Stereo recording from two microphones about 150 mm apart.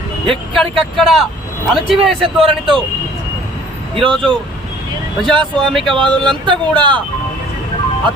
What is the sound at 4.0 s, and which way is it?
Speech, 35° right (ahead or behind).